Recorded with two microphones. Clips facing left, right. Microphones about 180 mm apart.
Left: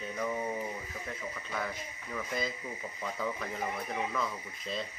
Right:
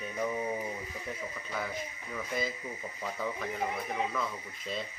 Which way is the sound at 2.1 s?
5° right (ahead or behind).